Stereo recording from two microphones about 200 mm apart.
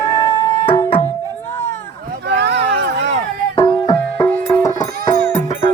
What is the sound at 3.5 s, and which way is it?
Music, 20° left (ahead or behind).